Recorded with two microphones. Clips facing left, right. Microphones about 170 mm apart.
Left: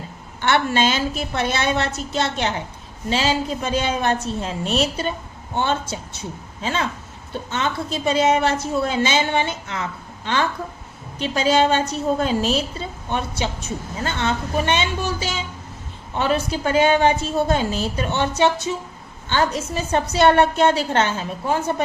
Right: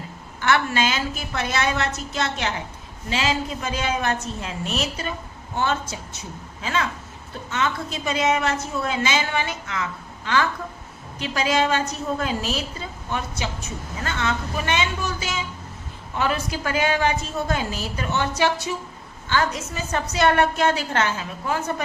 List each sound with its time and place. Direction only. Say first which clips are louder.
0.4 s a woman's voice: left 3 dB; 30° left (ahead or behind)
11.2 s a woman's voice: left 4 dB; 30° left (ahead or behind)